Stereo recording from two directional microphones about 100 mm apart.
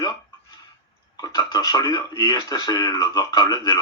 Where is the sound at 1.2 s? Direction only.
40° left (ahead or behind).